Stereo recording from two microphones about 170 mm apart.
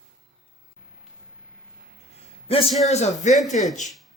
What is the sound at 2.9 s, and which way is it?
Speech, 45° left (ahead or behind).